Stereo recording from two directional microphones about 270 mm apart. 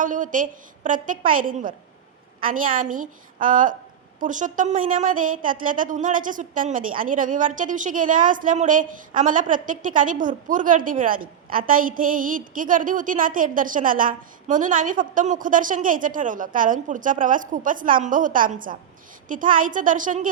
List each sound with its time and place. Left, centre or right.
0.0 s a woman's voice: right